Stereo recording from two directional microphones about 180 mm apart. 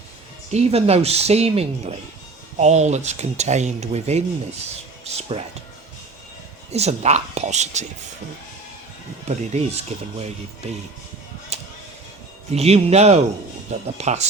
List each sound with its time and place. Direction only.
0.5 s speech: 35° right (ahead or behind)
6.7 s speech: 35° right (ahead or behind)
9.3 s speech: 35° right (ahead or behind)
11.5 s music: 35° right (ahead or behind)
12.5 s speech: 35° right (ahead or behind)